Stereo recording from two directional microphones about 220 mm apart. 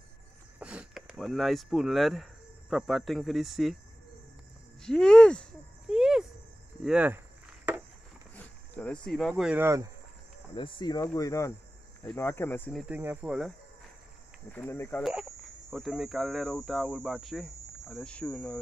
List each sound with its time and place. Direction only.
0.6 s speech: 5° right (ahead or behind)
4.8 s a sound: 5° left (ahead or behind)
6.8 s speech: 5° right (ahead or behind)
8.4 s speech: 5° left (ahead or behind); by 9.8 s 10° right (ahead or behind)
10.5 s speech: 20° left (ahead or behind)
12.8 s speech: 10° right (ahead or behind)
14.5 s speech: 10° left (ahead or behind)